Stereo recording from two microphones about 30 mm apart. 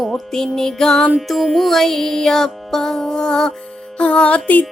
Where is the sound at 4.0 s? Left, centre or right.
Left.